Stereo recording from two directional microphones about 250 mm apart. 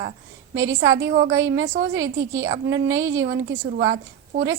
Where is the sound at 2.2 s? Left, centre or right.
Right.